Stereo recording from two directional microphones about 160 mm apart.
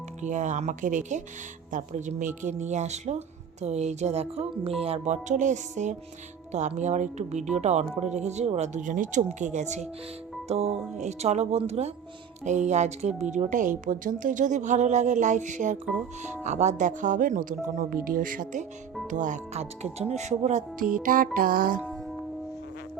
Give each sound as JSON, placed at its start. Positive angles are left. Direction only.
{"t": 0.2, "sound": "speech", "side_deg": -50}
{"t": 20.9, "sound": "music", "side_deg": -60}